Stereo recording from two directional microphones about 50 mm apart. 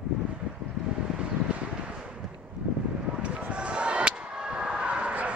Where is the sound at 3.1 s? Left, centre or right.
Right.